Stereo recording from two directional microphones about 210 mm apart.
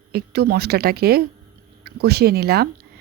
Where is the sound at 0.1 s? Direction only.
50° right (ahead or behind).